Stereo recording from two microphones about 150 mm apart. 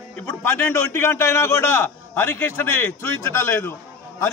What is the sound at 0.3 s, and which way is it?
A man's voice, 15° left (ahead or behind).